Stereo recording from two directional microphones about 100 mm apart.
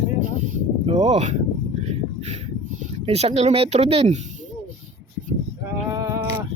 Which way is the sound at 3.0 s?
90° right.